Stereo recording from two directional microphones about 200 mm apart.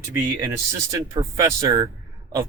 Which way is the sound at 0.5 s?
15° right (ahead or behind).